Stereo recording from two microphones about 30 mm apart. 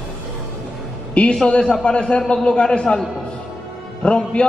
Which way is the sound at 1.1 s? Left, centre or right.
Left.